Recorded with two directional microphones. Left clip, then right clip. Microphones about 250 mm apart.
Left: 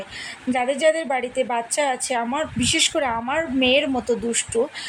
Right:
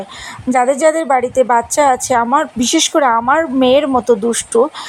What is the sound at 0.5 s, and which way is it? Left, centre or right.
A woman's voice, right.